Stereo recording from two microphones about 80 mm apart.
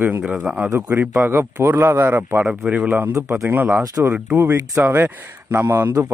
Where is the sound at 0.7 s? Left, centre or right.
Right.